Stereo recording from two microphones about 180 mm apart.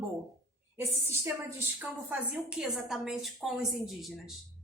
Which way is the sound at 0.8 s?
15° right (ahead or behind).